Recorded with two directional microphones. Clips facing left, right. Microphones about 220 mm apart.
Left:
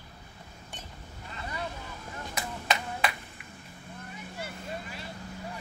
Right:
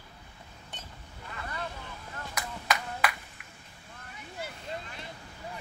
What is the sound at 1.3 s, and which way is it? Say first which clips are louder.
Vehicle: left 1 dB; 20° left (ahead or behind).